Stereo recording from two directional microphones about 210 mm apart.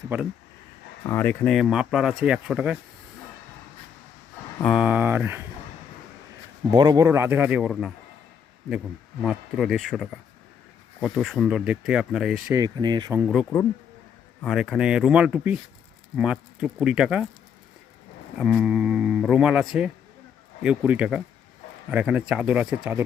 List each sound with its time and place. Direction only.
0.1 s a man's voice: 10° right (ahead or behind)
1.0 s speech: 10° left (ahead or behind); by 2.7 s 5° right (ahead or behind)
4.6 s a man's voice: 5° right (ahead or behind)
6.7 s a man's voice: 20° right (ahead or behind); by 7.9 s centre (ahead or behind)
9.2 s speech: centre (ahead or behind)
12.5 s speech: 20° right (ahead or behind)
13.1 s speech: 5° right (ahead or behind)
18.3 s speech: 5° right (ahead or behind)